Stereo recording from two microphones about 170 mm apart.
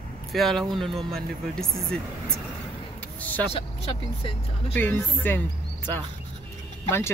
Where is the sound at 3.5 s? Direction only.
35° left (ahead or behind).